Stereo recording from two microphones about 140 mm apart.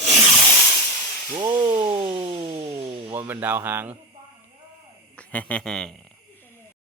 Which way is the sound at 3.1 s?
15° right (ahead or behind).